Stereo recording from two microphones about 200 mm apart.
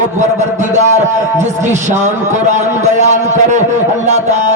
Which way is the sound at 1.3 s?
35° right (ahead or behind).